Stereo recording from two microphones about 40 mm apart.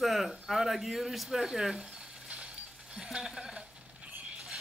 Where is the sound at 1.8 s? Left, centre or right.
Right.